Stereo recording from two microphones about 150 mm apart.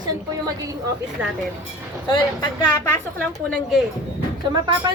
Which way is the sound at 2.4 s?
25° left (ahead or behind).